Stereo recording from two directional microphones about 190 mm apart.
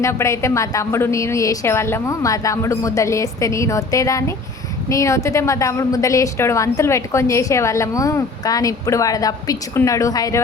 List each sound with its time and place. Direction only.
0.0 s a woman's voice: 15° left (ahead or behind)